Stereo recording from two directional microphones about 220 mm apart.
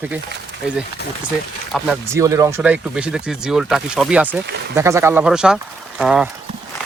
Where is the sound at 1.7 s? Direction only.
5° right (ahead or behind).